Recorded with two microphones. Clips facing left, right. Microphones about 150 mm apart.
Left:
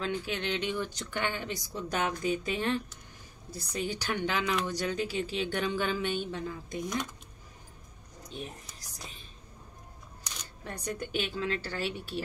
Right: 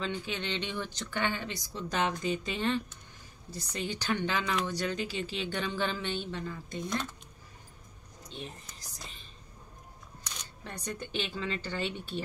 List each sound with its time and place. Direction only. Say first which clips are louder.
0.0 s speech: left 2 dB; 10° left (ahead or behind)
8.9 s whispering: left 2 dB; 10° left (ahead or behind)
10.6 s speech: left 3 dB; 10° left (ahead or behind)